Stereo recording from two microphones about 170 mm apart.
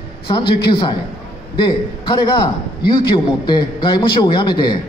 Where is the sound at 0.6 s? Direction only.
25° left (ahead or behind).